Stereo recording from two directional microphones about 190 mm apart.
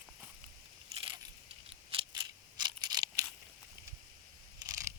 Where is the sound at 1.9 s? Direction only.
30° right (ahead or behind).